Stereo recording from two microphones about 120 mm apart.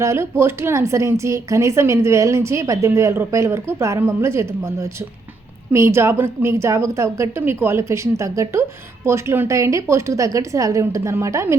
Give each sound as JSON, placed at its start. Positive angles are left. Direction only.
{"t": 0.0, "sound": "a woman's voice", "side_deg": -20}